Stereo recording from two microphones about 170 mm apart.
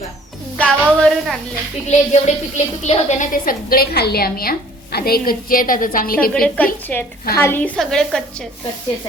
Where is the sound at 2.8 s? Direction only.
40° left (ahead or behind).